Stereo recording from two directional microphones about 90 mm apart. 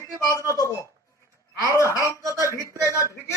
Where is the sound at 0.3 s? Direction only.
40° left (ahead or behind).